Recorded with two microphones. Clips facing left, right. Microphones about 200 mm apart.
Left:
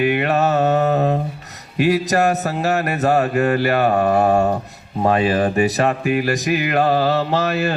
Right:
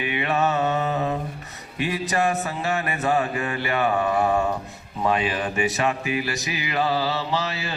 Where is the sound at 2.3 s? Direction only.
40° left (ahead or behind).